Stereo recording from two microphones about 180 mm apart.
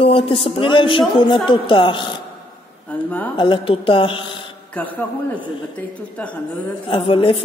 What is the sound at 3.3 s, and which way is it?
A man's voice, 30° left (ahead or behind).